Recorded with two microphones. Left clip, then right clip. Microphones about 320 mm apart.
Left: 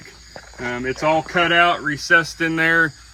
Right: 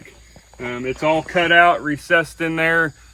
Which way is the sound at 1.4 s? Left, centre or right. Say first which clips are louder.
Right 4 dB; centre.